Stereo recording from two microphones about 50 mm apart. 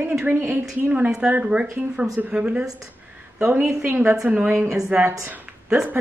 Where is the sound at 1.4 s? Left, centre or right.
Right.